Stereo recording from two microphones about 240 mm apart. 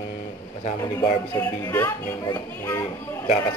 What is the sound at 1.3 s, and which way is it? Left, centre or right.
Speech, centre.